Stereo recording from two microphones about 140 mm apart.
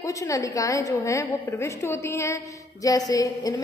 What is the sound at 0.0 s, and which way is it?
A woman's voice, 20° left (ahead or behind).